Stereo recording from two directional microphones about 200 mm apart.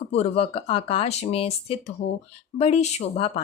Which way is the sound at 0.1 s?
30° left (ahead or behind).